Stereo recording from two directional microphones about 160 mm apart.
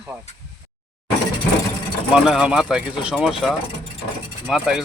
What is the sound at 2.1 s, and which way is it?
Speech, centre (ahead or behind).